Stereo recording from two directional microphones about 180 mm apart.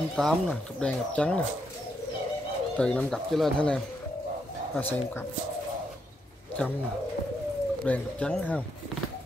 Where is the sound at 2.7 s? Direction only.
5° left (ahead or behind).